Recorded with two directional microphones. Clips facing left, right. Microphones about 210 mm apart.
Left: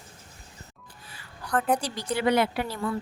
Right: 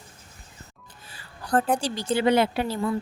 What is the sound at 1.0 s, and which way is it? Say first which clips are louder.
Music: right 5 dB; 30° right (ahead or behind).